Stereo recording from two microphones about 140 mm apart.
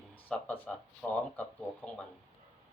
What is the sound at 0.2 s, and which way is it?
Speech, 10° left (ahead or behind).